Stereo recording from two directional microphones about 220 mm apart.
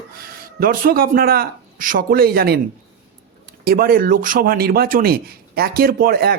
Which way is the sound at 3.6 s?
40° right (ahead or behind).